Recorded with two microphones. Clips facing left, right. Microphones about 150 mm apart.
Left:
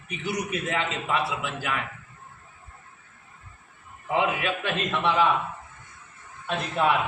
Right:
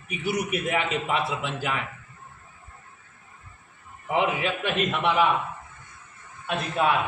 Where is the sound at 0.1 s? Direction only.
10° right (ahead or behind).